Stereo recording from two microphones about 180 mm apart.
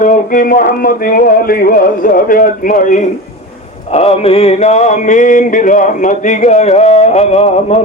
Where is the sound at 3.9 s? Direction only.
35° left (ahead or behind).